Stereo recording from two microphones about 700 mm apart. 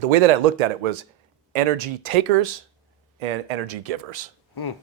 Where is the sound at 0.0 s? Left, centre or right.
Right.